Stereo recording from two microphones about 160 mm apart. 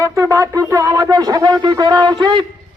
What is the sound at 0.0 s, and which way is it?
Speech, 20° right (ahead or behind).